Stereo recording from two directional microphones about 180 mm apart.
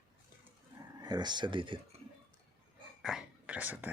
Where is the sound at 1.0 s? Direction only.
25° right (ahead or behind).